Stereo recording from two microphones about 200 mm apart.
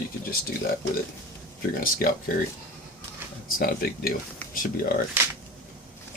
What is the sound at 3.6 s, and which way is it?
Speech, 45° left (ahead or behind).